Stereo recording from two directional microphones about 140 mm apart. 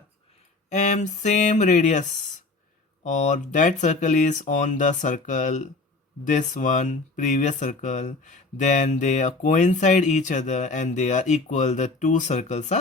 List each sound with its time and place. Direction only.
0.7 s speech: 55° left (ahead or behind)